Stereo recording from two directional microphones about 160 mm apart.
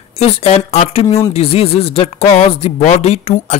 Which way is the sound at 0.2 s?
40° left (ahead or behind).